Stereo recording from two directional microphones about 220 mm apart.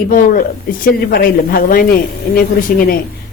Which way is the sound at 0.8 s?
40° left (ahead or behind).